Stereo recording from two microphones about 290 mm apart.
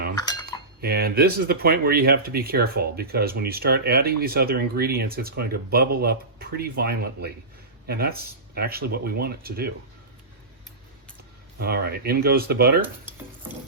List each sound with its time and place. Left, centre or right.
0.2 s cutlery: centre
0.8 s speech: right
11.6 s speech: right